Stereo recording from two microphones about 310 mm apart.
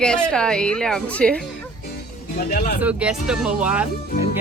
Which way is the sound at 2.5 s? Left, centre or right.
Left.